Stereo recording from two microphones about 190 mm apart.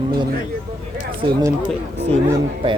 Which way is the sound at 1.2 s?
20° right (ahead or behind).